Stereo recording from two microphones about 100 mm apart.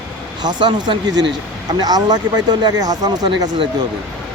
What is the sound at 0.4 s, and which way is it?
Speech, 50° right (ahead or behind).